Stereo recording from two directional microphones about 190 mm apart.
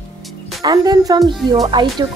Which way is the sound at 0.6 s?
20° right (ahead or behind).